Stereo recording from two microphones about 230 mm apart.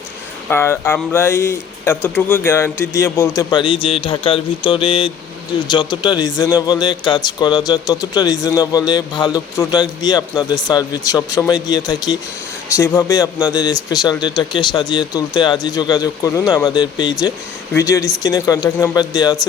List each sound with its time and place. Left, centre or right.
0.5 s a man's voice: centre